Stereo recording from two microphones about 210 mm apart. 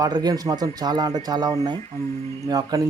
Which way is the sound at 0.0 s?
20° right (ahead or behind).